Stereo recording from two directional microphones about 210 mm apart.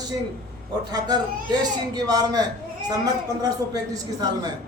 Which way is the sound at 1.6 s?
20° right (ahead or behind).